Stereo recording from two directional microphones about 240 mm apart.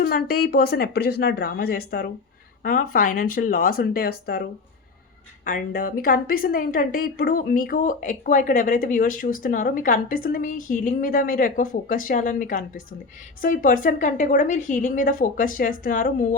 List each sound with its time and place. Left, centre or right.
0.0 s a woman's voice: left
5.5 s a woman's voice: left